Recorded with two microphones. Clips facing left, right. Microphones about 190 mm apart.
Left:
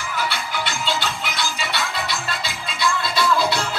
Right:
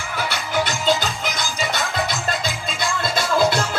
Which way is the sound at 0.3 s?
45° right (ahead or behind).